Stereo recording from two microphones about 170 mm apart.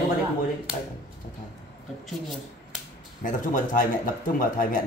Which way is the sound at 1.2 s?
50° left (ahead or behind).